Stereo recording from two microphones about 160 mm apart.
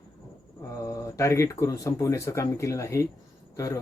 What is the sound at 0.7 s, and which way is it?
Speech, 20° left (ahead or behind).